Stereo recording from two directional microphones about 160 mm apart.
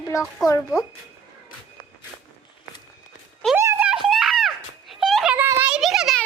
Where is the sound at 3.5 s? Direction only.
10° right (ahead or behind).